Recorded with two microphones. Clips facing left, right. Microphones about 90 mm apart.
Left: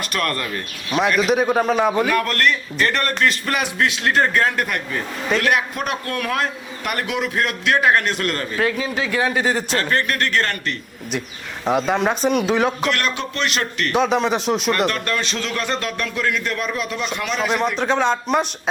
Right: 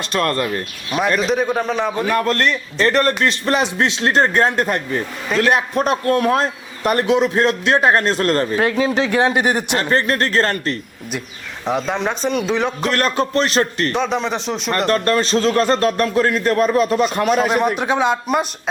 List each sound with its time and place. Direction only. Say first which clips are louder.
0.1 s a man's voice: right 6 dB; 30° right (ahead or behind)
0.9 s speech: even; 5° right (ahead or behind)
1.2 s a man's voice: left 1 dB; 5° left (ahead or behind)
2.0 s a man's voice: right 2 dB; 30° right (ahead or behind)
9.9 s a man's voice: right 4 dB; 30° right (ahead or behind)
11.6 s speech: left 2 dB; 5° left (ahead or behind)
12.8 s a man's voice: right 4 dB; 40° right (ahead or behind)
13.9 s speech: left 2 dB; 5° left (ahead or behind)
14.8 s a man's voice: right 6 dB; 35° right (ahead or behind)
17.7 s a man's voice: right 1 dB; 10° right (ahead or behind)